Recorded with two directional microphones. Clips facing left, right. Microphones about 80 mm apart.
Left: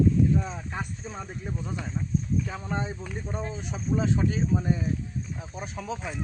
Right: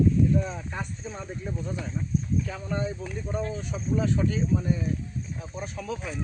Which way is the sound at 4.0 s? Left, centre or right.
Centre.